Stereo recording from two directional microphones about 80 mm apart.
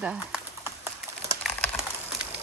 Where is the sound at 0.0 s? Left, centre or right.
Centre.